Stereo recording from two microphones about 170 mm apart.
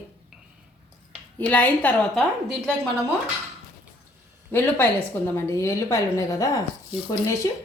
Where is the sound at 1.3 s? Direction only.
10° left (ahead or behind).